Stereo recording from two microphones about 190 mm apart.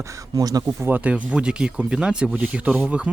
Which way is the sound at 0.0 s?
15° right (ahead or behind).